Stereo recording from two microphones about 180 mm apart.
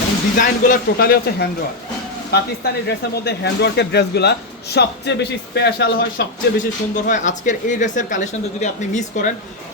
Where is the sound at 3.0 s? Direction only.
65° left (ahead or behind).